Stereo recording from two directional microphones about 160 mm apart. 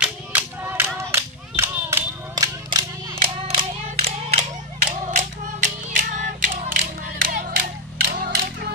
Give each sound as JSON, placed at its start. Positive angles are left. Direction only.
{"t": 0.0, "sound": "clapping", "side_deg": -10}
{"t": 2.3, "sound": "a sound", "side_deg": -25}
{"t": 3.4, "sound": "clapping", "side_deg": -40}
{"t": 5.0, "sound": "music", "side_deg": -50}
{"t": 8.1, "sound": "clapping", "side_deg": -70}